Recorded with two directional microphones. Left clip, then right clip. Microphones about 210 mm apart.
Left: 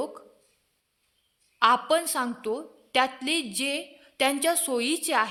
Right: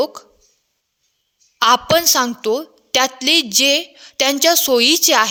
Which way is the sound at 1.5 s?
50° right (ahead or behind).